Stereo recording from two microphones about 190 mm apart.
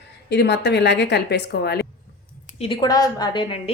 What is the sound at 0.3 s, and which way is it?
A woman's voice, 65° left (ahead or behind).